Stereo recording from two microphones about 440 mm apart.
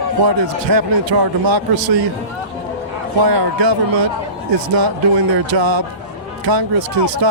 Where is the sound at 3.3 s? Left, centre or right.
Right.